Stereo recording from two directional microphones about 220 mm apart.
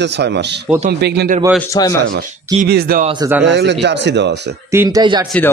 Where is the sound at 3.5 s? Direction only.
50° right (ahead or behind).